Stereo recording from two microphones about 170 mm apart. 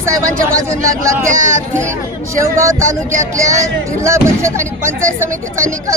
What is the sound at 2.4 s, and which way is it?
Speech, 15° right (ahead or behind).